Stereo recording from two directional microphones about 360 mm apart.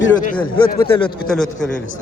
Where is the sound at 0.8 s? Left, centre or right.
Centre.